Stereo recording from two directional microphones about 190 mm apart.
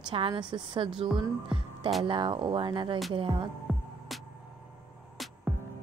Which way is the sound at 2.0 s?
25° right (ahead or behind).